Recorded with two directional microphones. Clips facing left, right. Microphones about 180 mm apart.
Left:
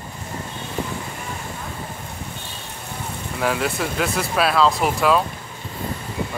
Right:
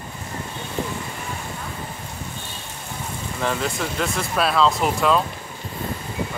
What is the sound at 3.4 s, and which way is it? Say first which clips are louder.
Speech: left 2 dB; 5° left (ahead or behind).